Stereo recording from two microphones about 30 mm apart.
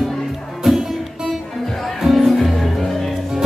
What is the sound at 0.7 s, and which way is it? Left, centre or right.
Music, centre.